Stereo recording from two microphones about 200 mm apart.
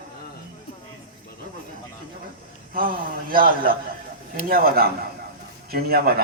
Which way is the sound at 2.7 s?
45° right (ahead or behind).